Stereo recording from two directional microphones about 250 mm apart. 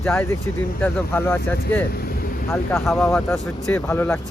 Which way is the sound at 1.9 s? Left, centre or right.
Left.